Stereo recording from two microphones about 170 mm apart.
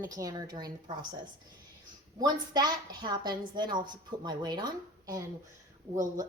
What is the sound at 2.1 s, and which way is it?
A woman's voice, 25° right (ahead or behind).